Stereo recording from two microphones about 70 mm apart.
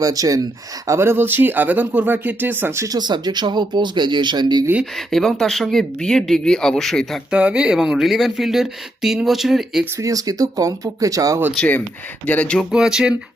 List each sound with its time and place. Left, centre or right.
0.0 s speech: right
0.9 s speech: right
2.7 s speech: right
3.0 s speech: right
4.9 s speech: centre
7.3 s speech: centre
10.0 s speech: right
12.2 s speech: left
12.7 s speech: centre